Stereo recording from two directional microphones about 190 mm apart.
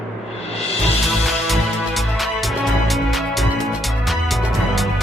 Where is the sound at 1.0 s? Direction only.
Centre (ahead or behind).